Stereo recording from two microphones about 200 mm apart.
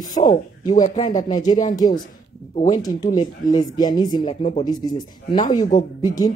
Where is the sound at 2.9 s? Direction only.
40° left (ahead or behind).